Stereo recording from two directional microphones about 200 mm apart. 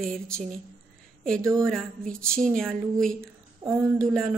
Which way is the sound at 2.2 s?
5° left (ahead or behind).